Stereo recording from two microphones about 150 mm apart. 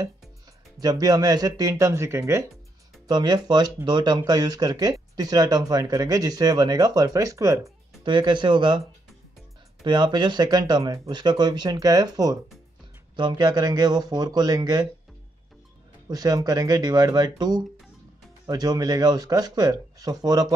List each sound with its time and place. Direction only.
0.7 s speech: 25° right (ahead or behind)
8.0 s speech: 30° right (ahead or behind)
9.8 s speech: 30° right (ahead or behind)
16.1 s speech: 25° right (ahead or behind)